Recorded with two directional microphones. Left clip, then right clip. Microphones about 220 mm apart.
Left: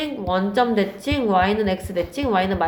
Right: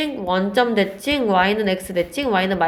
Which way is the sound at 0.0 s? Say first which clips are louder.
Right 2 dB; 35° right (ahead or behind).